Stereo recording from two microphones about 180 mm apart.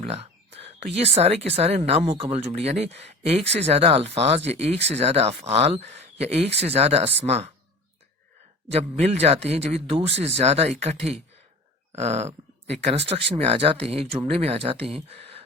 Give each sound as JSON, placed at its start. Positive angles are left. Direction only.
{"t": 0.0, "sound": "speech", "side_deg": -35}
{"t": 8.7, "sound": "speech", "side_deg": -35}